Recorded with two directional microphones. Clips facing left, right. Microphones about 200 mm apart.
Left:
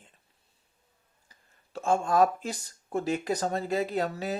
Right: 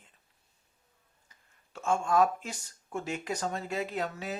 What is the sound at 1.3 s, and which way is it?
Speech, 35° left (ahead or behind).